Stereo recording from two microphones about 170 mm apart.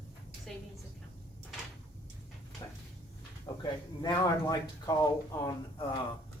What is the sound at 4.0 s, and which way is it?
A man's voice, 20° left (ahead or behind).